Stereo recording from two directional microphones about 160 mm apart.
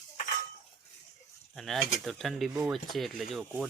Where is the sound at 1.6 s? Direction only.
Centre (ahead or behind).